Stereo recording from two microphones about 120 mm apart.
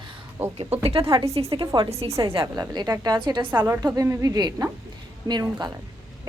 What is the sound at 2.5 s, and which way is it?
Speech, 35° right (ahead or behind).